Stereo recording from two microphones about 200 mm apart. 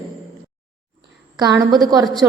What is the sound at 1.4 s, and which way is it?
Speech, 20° right (ahead or behind).